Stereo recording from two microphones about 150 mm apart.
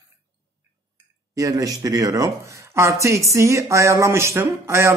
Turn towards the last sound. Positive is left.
turn(degrees=-20)  # may be behind; listen again after turning